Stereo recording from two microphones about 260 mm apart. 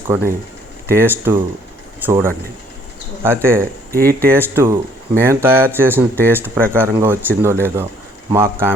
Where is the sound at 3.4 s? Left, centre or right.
Centre.